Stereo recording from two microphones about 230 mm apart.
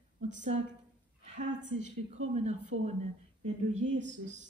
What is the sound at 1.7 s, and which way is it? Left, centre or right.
Speech, right.